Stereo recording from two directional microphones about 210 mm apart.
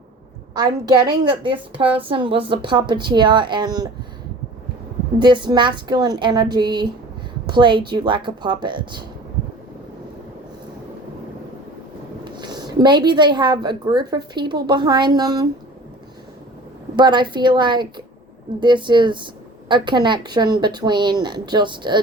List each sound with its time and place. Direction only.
0.5 s speech: 20° right (ahead or behind)
5.2 s speech: 20° right (ahead or behind)
12.2 s speech: 20° right (ahead or behind)
16.9 s speech: 20° right (ahead or behind)